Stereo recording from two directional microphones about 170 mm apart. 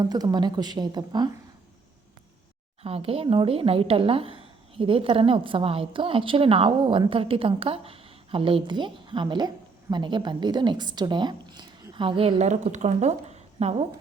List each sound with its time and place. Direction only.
0.0 s a woman's voice: 25° right (ahead or behind)
2.8 s a woman's voice: 35° right (ahead or behind)